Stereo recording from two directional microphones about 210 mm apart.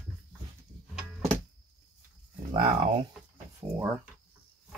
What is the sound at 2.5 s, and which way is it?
Speech, 20° right (ahead or behind).